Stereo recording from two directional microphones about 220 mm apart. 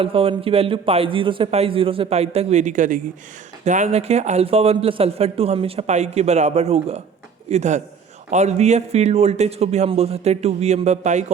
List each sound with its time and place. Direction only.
0.0 s a man's voice: 25° right (ahead or behind)